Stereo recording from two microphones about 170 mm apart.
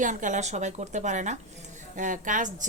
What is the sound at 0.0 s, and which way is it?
Speech, 50° right (ahead or behind).